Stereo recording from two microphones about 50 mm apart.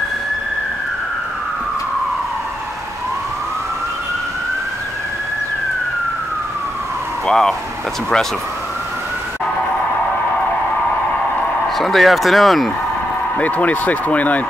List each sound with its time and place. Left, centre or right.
7.2 s speech: centre
11.7 s speech: centre
13.4 s speech: left